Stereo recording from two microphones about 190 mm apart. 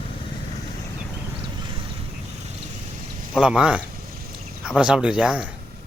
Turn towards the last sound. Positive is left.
turn(degrees=-5)  # may be behind; listen again after turning